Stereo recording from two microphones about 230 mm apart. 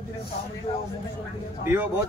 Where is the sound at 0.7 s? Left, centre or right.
Left.